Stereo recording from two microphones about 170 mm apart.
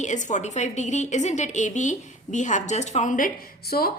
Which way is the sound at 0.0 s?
45° left (ahead or behind).